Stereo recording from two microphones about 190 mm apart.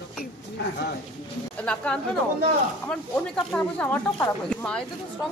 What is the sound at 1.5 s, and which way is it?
A woman's voice, 5° left (ahead or behind).